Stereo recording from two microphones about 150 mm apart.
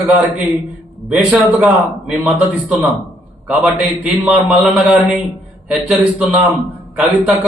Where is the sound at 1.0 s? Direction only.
5° right (ahead or behind).